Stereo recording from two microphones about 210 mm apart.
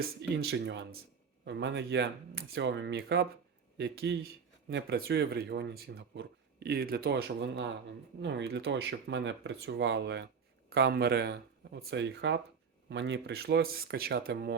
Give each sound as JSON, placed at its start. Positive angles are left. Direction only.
{"t": 0.0, "sound": "speech", "side_deg": -55}